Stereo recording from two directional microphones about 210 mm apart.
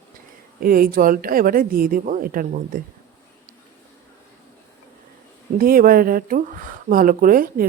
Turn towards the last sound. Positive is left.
turn(degrees=-40)  # may be behind; listen again after turning